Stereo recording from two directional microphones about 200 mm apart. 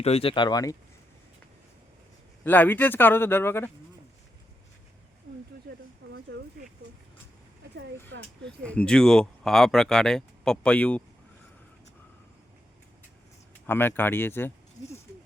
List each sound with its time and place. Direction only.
0.0 s speech: 30° left (ahead or behind)
2.4 s speech: 10° left (ahead or behind)
6.1 s a sound: 55° right (ahead or behind)
8.4 s speech: 5° left (ahead or behind)
13.7 s speech: 10° left (ahead or behind)